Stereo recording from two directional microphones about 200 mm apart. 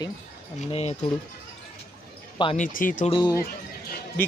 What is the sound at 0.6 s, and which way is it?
Speech, 30° left (ahead or behind).